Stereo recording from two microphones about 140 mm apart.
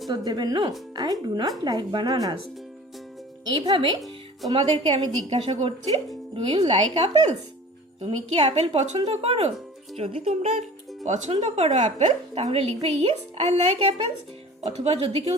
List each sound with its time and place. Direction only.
0.3 s speech: 30° right (ahead or behind)
3.4 s a woman's voice: 35° right (ahead or behind)
5.3 s a woman's voice: 45° right (ahead or behind)